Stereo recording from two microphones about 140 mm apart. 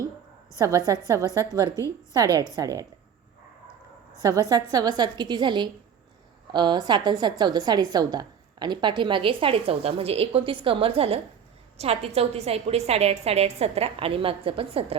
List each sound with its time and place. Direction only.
0.6 s a woman's voice: 25° right (ahead or behind)
4.2 s a woman's voice: 25° right (ahead or behind); by 14.9 s 40° right (ahead or behind)